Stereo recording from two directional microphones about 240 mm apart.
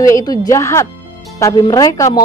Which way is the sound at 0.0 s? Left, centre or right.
Centre.